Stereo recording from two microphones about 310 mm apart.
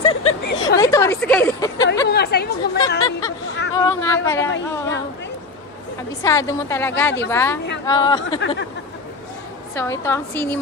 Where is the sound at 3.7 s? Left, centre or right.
Centre.